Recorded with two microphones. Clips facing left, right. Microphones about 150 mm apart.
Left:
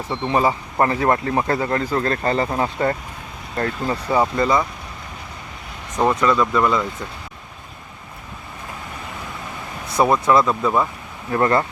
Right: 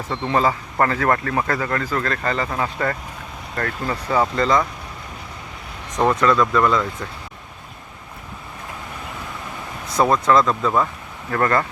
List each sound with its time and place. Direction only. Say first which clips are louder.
0.1 s speech: left 1 dB; 20° left (ahead or behind)
6.0 s speech: even; 10° left (ahead or behind)
10.0 s speech: even; 10° left (ahead or behind)
11.3 s speech: left 2 dB; 20° left (ahead or behind)